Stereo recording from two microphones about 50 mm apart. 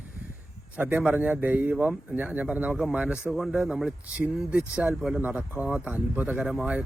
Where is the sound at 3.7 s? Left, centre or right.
Centre.